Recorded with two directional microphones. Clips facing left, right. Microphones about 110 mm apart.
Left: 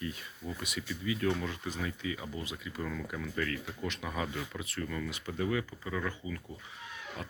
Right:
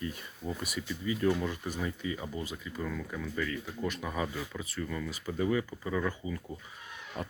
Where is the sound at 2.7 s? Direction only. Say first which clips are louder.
Even; centre (ahead or behind).